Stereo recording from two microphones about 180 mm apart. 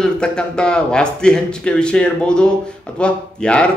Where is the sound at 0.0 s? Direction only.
5° left (ahead or behind).